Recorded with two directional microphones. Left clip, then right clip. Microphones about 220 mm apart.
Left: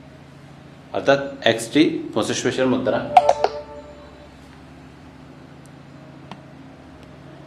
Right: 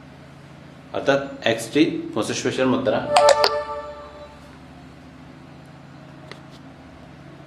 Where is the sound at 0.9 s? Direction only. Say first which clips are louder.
Left 2 dB; 20° left (ahead or behind).